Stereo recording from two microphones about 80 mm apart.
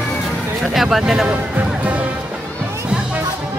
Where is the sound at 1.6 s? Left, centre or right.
Centre.